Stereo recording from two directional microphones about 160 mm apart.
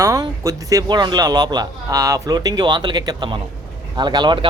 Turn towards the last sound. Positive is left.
turn(degrees=-25)  # may be behind; listen again after turning